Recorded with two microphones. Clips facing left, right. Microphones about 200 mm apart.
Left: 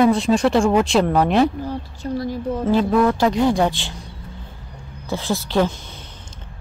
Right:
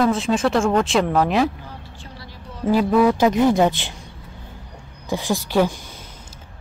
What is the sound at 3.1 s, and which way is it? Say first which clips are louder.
Speech: right 1 dB; 20° right (ahead or behind).